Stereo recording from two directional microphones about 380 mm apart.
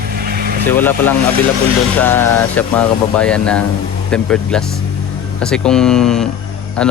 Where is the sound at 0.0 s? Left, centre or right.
Right.